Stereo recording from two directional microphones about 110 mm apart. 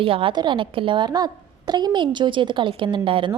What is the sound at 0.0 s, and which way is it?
A woman's voice, 55° right (ahead or behind).